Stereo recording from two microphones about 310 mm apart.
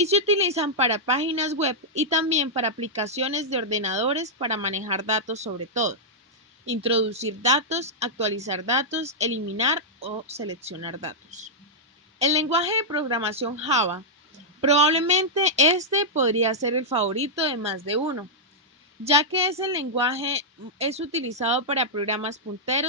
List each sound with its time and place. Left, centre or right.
0.0 s a woman's voice: centre
19.0 s a woman's voice: centre